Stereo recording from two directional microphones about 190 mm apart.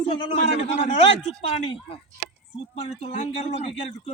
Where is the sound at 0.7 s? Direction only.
35° left (ahead or behind).